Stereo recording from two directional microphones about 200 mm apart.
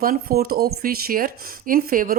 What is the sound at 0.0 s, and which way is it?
Speech, 45° right (ahead or behind).